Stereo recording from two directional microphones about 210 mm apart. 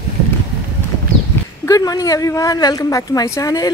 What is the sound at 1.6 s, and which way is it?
A woman's voice, 15° left (ahead or behind).